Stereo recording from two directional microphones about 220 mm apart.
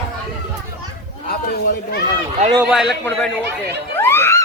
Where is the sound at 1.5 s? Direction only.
45° left (ahead or behind).